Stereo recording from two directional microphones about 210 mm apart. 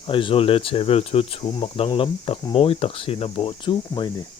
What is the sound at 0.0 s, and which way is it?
Speech, 25° left (ahead or behind).